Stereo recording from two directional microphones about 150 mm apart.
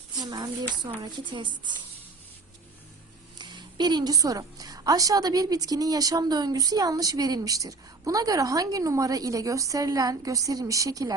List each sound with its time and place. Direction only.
0.2 s a woman's voice: 30° right (ahead or behind)
3.3 s a woman's voice: 30° right (ahead or behind)